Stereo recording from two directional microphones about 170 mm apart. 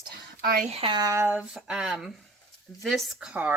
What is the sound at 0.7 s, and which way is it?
Speech, 35° right (ahead or behind).